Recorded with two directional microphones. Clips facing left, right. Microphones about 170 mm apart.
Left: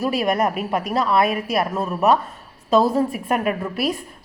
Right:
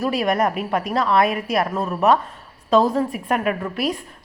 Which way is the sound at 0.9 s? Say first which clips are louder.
Even; 5° left (ahead or behind).